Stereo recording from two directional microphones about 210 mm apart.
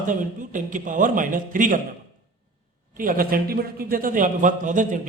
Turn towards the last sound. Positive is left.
turn(degrees=-40)  # may be behind; listen again after turning